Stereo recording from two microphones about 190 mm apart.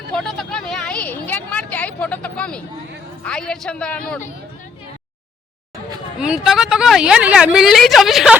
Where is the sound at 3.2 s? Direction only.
5° left (ahead or behind).